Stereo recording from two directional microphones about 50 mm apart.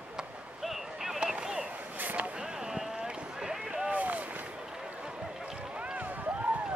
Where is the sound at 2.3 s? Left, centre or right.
Centre.